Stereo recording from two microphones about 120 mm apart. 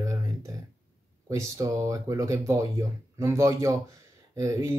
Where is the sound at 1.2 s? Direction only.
25° right (ahead or behind).